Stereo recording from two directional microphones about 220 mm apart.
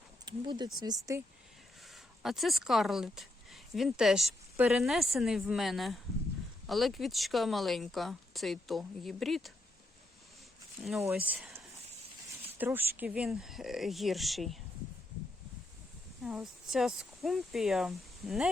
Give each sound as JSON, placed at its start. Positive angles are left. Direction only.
{"t": 0.3, "sound": "speech", "side_deg": -20}
{"t": 1.9, "sound": "speech", "side_deg": 0}
{"t": 11.1, "sound": "speech", "side_deg": -5}
{"t": 16.2, "sound": "speech", "side_deg": 0}